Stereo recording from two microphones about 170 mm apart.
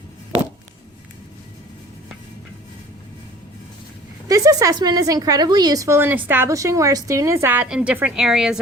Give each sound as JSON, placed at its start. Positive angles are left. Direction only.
{"t": 4.3, "sound": "a woman's voice", "side_deg": -20}